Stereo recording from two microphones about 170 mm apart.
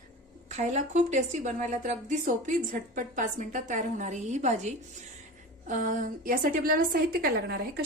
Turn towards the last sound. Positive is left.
turn(degrees=-65)  # may be behind; listen again after turning